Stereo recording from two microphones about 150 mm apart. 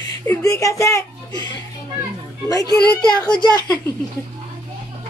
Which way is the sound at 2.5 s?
25° left (ahead or behind).